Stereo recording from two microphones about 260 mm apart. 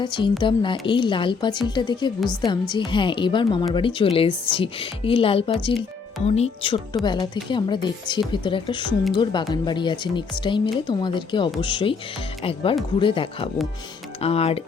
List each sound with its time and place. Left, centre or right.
0.0 s a woman's voice: centre